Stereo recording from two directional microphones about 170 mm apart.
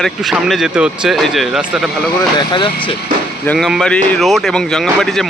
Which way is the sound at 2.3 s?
30° left (ahead or behind).